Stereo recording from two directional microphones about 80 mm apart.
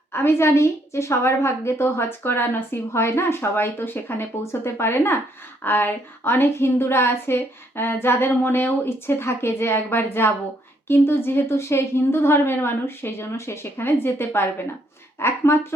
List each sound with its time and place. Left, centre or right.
0.1 s a woman's voice: left